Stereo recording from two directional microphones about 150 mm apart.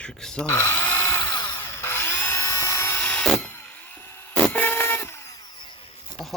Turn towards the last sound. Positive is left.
turn(degrees=15)  # may be behind; listen again after turning